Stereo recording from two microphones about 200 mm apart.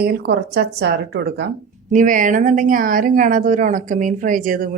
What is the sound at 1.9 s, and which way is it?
A woman's voice, 40° right (ahead or behind).